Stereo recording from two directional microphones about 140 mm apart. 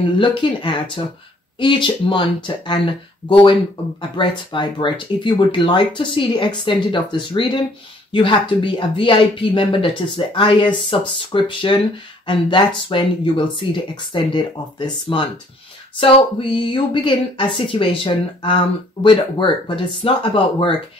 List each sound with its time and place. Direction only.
0.2 s speech: 35° left (ahead or behind)